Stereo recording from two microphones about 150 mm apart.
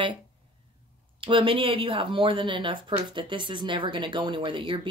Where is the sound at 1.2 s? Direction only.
35° right (ahead or behind).